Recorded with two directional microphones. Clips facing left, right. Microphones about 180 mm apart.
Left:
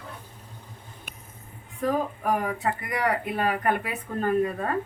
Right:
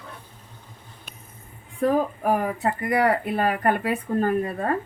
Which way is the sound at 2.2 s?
35° right (ahead or behind).